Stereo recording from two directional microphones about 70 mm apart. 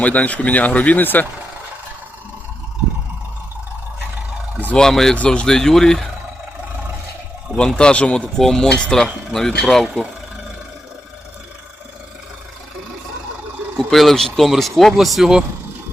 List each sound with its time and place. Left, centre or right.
0.0 s speech: left
4.8 s speech: centre
5.1 s speech: centre
7.8 s speech: centre
8.4 s speech: centre
13.7 s speech: centre